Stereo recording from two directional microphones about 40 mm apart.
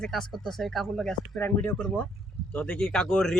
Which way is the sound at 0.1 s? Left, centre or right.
Centre.